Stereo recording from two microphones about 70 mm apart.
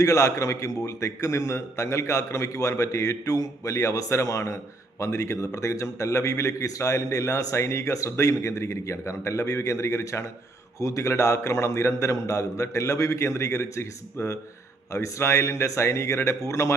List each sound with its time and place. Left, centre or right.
0.0 s a man's voice: left